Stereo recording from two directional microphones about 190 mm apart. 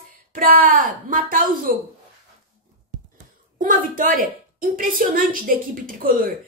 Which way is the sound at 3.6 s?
45° right (ahead or behind).